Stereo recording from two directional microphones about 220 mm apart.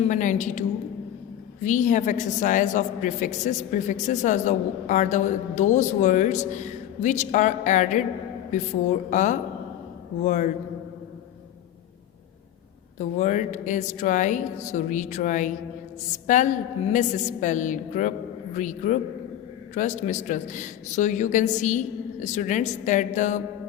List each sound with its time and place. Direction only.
0.1 s a woman's voice: 35° left (ahead or behind)
1.6 s a woman's voice: 35° left (ahead or behind)
9.0 s a woman's voice: 35° left (ahead or behind)
13.0 s a woman's voice: 35° left (ahead or behind)